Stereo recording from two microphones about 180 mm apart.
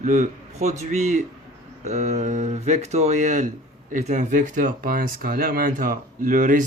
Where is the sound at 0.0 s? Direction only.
45° right (ahead or behind).